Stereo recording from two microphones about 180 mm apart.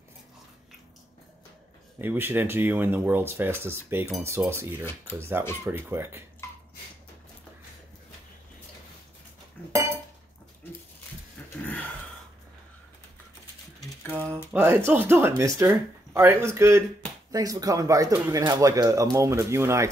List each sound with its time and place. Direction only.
2.0 s speech: 10° right (ahead or behind)
14.5 s speech: 10° right (ahead or behind)